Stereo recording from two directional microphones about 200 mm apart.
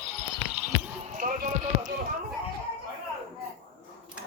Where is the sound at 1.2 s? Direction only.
45° right (ahead or behind).